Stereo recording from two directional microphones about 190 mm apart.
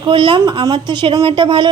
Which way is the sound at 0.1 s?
25° right (ahead or behind).